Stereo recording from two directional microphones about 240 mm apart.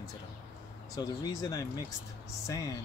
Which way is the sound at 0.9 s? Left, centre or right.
Centre.